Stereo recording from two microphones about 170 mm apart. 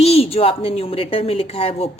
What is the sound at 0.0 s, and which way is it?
A woman's voice, 35° left (ahead or behind).